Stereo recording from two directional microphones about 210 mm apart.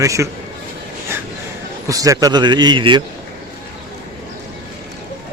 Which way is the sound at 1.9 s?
15° right (ahead or behind).